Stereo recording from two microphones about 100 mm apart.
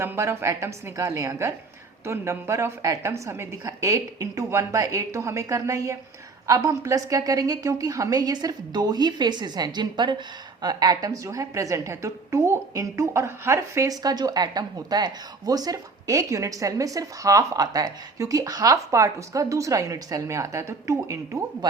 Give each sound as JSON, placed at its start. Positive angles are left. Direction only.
{"t": 0.0, "sound": "a woman's voice", "side_deg": -25}